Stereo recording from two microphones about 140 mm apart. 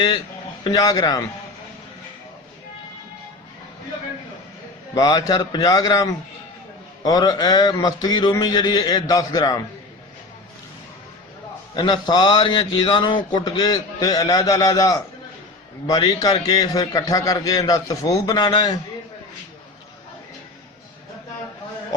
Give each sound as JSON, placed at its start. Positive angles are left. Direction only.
{"t": 0.6, "sound": "a man's voice", "side_deg": 25}
{"t": 4.9, "sound": "a man's voice", "side_deg": 25}
{"t": 11.8, "sound": "a man's voice", "side_deg": 30}